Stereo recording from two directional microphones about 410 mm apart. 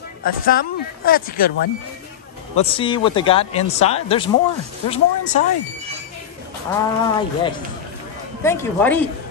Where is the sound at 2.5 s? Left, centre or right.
Centre.